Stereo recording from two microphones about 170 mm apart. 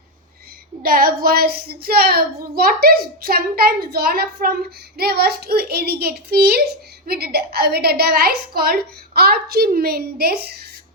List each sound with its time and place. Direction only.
0.8 s speech: 60° right (ahead or behind)